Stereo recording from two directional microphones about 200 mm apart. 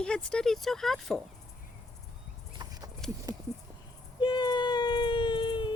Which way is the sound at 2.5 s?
20° right (ahead or behind).